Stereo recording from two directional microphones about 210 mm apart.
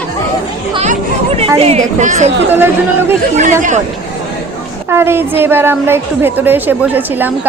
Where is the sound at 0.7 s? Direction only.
30° right (ahead or behind).